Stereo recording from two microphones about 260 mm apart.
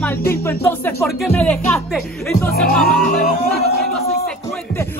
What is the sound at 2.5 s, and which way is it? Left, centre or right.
Speech, left.